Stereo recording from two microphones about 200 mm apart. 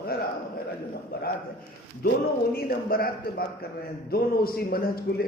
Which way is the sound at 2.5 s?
50° left (ahead or behind).